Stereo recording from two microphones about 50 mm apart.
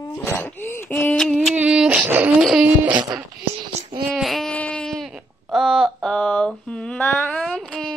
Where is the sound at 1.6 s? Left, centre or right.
Right.